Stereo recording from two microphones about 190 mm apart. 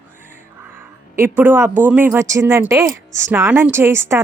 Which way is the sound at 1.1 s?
10° right (ahead or behind).